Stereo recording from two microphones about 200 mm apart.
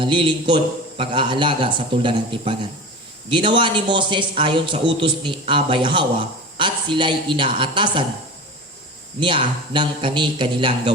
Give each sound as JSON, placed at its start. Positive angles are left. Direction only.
{"t": 0.0, "sound": "a man's voice", "side_deg": -25}
{"t": 9.2, "sound": "a man's voice", "side_deg": -25}